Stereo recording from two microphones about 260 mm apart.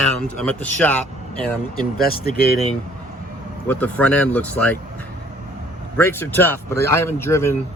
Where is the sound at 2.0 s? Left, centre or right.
Left.